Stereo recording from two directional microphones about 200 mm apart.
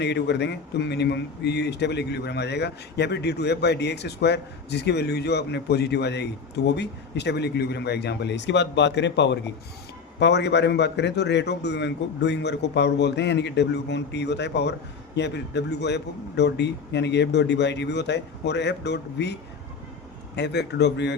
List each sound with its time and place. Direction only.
0.0 s speech: 60° left (ahead or behind)